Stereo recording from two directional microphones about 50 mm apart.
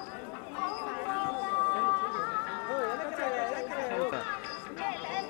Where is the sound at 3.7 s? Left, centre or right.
Centre.